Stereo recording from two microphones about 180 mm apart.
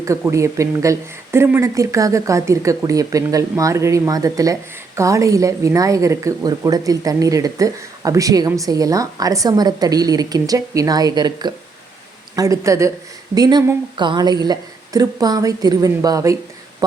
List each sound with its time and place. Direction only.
0.0 s speech: 15° right (ahead or behind)